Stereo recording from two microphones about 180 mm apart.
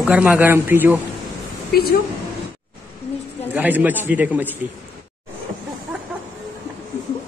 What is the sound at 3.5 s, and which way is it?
A man's voice, 10° right (ahead or behind).